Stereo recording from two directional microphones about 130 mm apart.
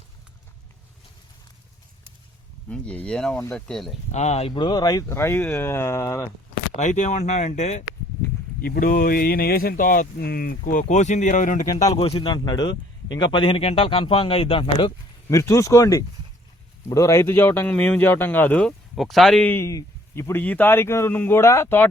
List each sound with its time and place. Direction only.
2.6 s speech: 10° left (ahead or behind)
4.1 s speech: 60° left (ahead or behind)
4.5 s a man's voice: 35° left (ahead or behind)
6.7 s speech: 65° left (ahead or behind)
8.8 s speech: 90° left
11.9 s speech: 45° left (ahead or behind)
15.3 s a man's voice: 25° left (ahead or behind)
18.9 s speech: centre (ahead or behind)
19.5 s a man's voice: 20° left (ahead or behind)